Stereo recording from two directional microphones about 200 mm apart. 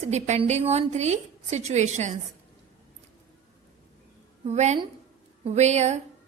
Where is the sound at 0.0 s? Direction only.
35° right (ahead or behind).